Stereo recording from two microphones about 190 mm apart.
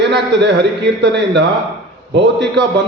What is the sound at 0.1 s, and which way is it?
A man's voice, 65° right (ahead or behind).